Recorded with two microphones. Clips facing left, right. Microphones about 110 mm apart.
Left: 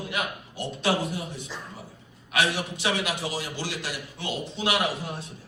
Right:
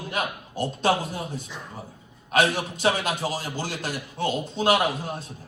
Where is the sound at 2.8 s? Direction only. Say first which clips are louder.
Right 5 dB; 40° right (ahead or behind).